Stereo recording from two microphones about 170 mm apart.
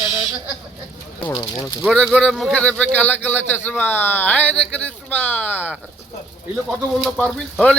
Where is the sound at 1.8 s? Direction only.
Centre (ahead or behind).